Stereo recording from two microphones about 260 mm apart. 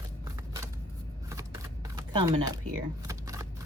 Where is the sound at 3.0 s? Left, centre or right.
Centre.